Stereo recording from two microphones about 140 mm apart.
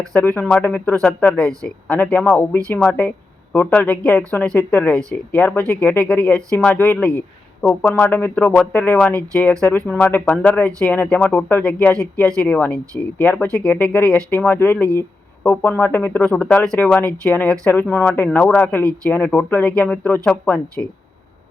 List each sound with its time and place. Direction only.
0.1 s speech: 10° left (ahead or behind)